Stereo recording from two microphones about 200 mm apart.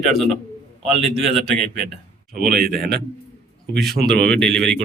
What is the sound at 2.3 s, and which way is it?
Speech, 45° right (ahead or behind).